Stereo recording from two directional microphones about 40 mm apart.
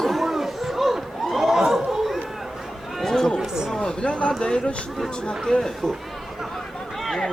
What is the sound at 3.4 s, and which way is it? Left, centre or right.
Chatter, centre.